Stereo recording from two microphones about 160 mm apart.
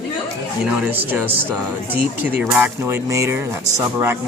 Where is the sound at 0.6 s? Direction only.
5° right (ahead or behind).